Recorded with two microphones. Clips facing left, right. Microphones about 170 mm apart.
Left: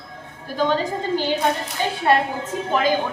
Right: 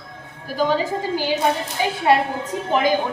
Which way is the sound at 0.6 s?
10° right (ahead or behind).